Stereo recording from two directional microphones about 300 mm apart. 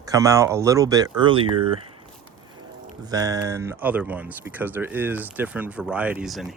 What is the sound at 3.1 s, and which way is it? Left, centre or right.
Speech, centre.